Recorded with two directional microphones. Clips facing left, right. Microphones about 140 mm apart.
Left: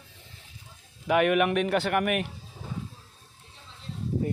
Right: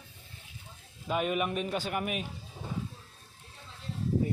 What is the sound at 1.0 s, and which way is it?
Speech, 75° left (ahead or behind).